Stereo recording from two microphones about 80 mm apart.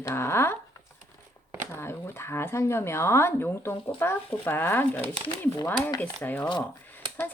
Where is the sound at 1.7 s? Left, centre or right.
Left.